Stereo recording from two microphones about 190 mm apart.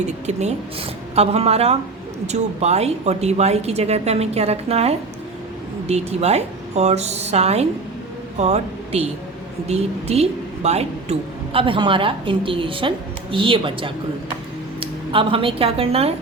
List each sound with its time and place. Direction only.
0.3 s a woman's voice: 35° right (ahead or behind)